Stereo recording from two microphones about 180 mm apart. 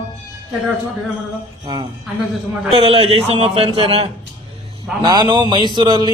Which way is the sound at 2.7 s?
30° right (ahead or behind).